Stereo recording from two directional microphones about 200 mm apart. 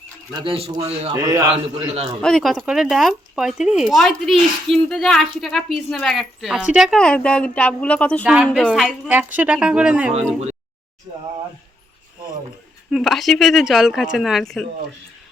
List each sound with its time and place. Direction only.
0.3 s a man's voice: 25° right (ahead or behind)
1.1 s a man's voice: 15° right (ahead or behind)
2.2 s speech: centre (ahead or behind)
8.2 s speech: 5° right (ahead or behind)
12.9 s speech: centre (ahead or behind)